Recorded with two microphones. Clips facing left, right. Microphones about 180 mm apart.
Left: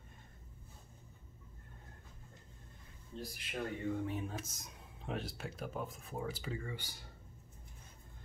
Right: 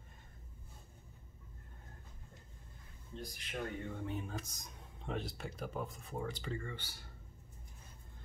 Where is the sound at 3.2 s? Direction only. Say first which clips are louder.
Left 1 dB; 5° left (ahead or behind).